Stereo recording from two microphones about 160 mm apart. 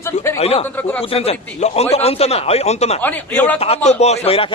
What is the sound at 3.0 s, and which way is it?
Speech, 10° left (ahead or behind).